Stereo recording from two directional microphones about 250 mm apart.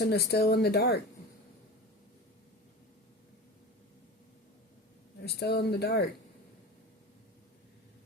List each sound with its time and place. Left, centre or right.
0.0 s speech: left
5.2 s speech: left